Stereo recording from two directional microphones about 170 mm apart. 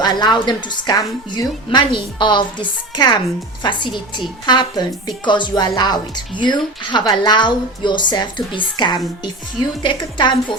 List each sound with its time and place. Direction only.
0.0 s a woman's voice: 25° left (ahead or behind)